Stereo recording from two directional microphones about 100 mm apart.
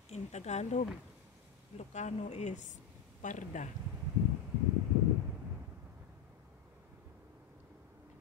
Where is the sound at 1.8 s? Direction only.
90° left.